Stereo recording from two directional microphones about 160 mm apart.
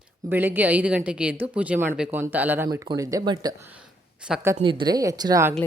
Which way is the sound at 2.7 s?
20° right (ahead or behind).